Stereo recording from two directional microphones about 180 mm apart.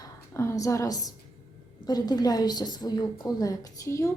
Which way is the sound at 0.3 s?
15° left (ahead or behind).